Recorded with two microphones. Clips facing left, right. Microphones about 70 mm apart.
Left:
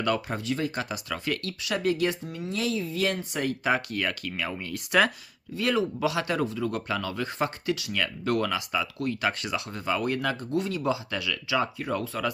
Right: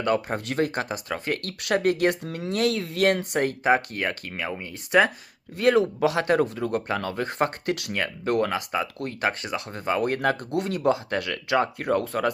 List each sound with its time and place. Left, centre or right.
0.0 s speech: right
0.3 s speech: right
2.2 s speech: right
4.4 s speech: right
5.5 s speech: right
7.9 s speech: right